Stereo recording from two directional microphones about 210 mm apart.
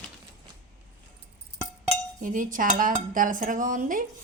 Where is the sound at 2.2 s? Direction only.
40° right (ahead or behind).